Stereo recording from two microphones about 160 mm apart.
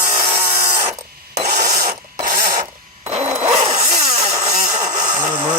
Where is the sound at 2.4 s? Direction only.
20° right (ahead or behind).